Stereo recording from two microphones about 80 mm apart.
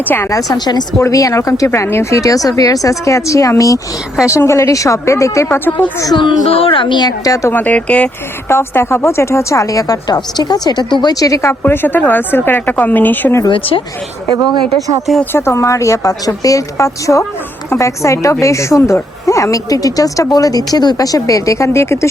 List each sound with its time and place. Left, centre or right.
0.0 s speech: left
0.3 s a woman's voice: left
0.9 s a woman's voice: left
5.5 s speech: left
6.1 s speech: left
7.5 s speech: centre
8.4 s a woman's voice: left
11.6 s speech: left
15.2 s a woman's voice: left